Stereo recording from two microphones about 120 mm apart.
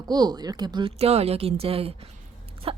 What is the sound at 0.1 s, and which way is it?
Speech, 35° right (ahead or behind).